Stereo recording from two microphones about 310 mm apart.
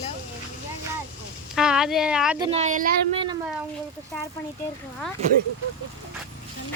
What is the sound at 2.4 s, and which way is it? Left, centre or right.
Speech, right.